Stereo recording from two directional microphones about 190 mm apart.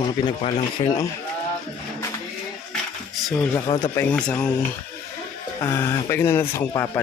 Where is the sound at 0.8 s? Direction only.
30° left (ahead or behind).